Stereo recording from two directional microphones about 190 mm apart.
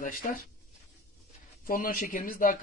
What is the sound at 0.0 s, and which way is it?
Speech, 45° left (ahead or behind).